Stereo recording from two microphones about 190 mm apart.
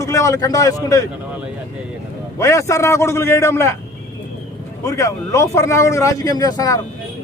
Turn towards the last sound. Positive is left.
turn(degrees=20)  # may be behind; listen again after turning